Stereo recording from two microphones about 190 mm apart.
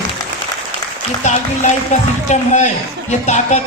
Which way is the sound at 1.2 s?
40° left (ahead or behind).